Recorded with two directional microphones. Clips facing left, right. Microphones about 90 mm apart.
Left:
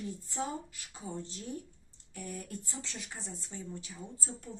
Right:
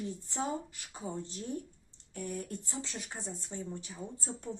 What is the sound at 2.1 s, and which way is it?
A woman's voice, 35° right (ahead or behind).